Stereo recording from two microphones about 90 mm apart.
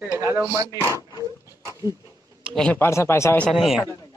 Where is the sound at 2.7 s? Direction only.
30° left (ahead or behind).